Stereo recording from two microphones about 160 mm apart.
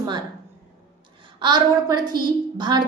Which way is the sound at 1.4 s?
25° right (ahead or behind).